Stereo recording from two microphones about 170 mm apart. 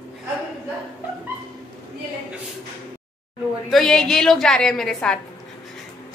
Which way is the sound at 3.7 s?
5° left (ahead or behind).